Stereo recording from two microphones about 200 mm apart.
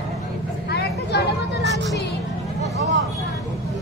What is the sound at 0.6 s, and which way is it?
Vehicle, 55° left (ahead or behind).